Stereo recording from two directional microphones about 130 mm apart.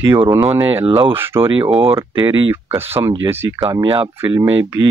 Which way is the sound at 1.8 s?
40° right (ahead or behind).